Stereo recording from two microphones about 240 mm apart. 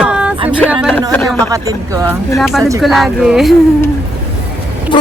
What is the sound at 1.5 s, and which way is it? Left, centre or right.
Speech, centre.